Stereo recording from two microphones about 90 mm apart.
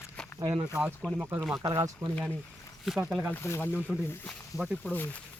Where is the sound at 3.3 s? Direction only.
25° left (ahead or behind).